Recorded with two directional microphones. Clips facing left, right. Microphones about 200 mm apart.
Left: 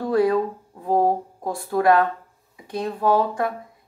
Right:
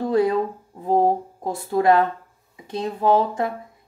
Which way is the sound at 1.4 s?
25° right (ahead or behind).